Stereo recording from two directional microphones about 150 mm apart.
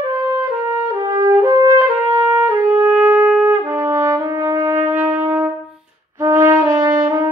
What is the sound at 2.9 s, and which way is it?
Brass instrument, 10° right (ahead or behind).